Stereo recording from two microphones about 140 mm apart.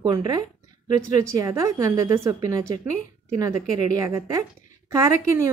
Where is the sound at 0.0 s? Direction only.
30° right (ahead or behind).